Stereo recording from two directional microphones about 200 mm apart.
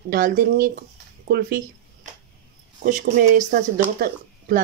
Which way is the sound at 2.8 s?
45° right (ahead or behind).